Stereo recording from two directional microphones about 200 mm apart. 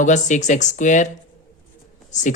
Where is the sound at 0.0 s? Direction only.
35° left (ahead or behind).